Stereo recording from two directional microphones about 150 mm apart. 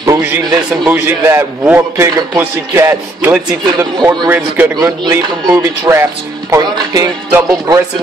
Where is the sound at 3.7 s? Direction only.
25° right (ahead or behind).